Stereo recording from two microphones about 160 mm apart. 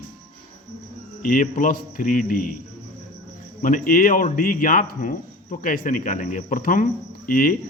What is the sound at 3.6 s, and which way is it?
Speech, 60° left (ahead or behind).